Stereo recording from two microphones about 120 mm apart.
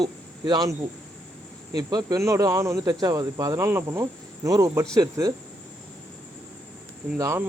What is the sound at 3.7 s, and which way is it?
Speech, 20° right (ahead or behind).